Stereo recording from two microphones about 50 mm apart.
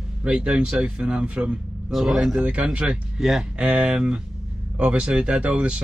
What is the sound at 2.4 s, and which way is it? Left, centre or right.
Speech, right.